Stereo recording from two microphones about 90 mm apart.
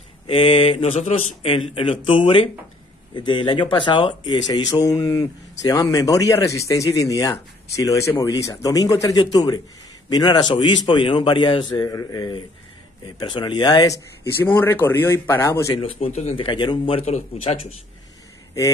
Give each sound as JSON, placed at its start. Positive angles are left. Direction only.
{"t": 0.3, "sound": "speech", "side_deg": 75}
{"t": 3.2, "sound": "a man's voice", "side_deg": 60}
{"t": 11.7, "sound": "speech", "side_deg": 40}
{"t": 14.4, "sound": "speech", "side_deg": 25}
{"t": 15.7, "sound": "speech", "side_deg": 90}
{"t": 16.3, "sound": "a man's voice", "side_deg": 65}